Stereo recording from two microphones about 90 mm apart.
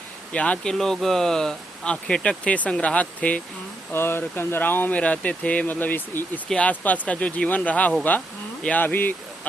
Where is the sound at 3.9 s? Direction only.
25° left (ahead or behind).